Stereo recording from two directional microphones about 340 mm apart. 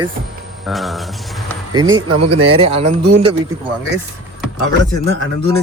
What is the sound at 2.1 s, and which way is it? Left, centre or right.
Speech, right.